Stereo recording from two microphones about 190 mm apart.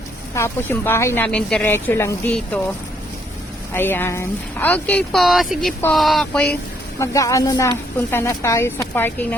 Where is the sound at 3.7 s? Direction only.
10° left (ahead or behind).